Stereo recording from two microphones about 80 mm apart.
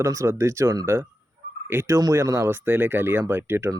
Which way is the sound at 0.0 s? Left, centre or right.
Right.